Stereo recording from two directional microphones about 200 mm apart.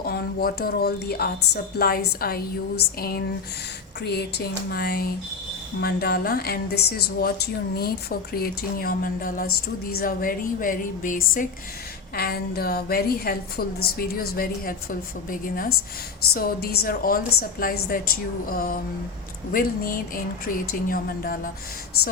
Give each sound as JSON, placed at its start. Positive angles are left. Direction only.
{"t": 0.0, "sound": "speech", "side_deg": 50}